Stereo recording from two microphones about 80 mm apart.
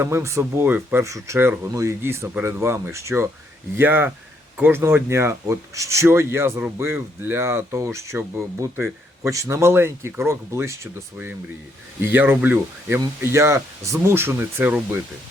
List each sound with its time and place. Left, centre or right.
0.0 s speech: right
0.7 s speech: right
1.0 s speech: right
1.7 s speech: right
3.8 s speech: right
9.3 s speech: right
12.0 s speech: right